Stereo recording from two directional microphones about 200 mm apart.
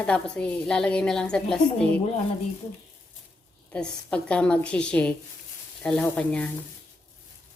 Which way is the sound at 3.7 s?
5° left (ahead or behind).